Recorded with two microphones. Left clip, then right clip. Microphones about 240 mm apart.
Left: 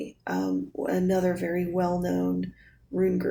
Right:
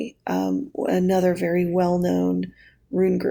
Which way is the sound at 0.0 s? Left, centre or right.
Right.